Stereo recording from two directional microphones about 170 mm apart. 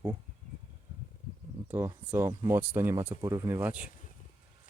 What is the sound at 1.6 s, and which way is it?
Speech, 15° right (ahead or behind).